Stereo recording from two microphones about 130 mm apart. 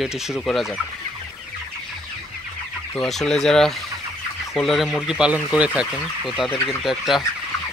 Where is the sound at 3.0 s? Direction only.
5° left (ahead or behind).